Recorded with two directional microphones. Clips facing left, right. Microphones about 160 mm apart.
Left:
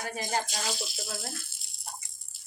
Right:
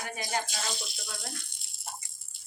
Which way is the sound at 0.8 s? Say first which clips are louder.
Left 4 dB; centre (ahead or behind).